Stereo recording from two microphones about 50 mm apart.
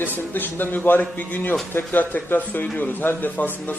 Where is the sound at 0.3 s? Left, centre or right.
Left.